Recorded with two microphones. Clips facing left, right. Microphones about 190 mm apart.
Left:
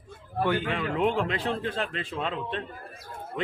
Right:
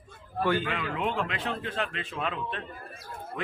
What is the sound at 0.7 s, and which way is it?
A man's voice, 35° left (ahead or behind).